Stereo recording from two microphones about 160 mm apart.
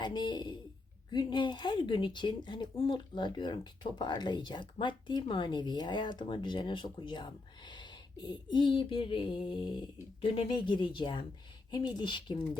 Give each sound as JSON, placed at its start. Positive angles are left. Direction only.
{"t": 0.0, "sound": "speech", "side_deg": 30}